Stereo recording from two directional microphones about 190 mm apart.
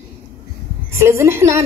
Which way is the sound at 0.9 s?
15° right (ahead or behind).